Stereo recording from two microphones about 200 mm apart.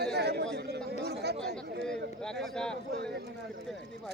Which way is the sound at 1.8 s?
5° left (ahead or behind).